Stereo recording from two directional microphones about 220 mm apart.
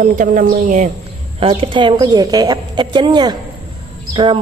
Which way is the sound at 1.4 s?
25° right (ahead or behind).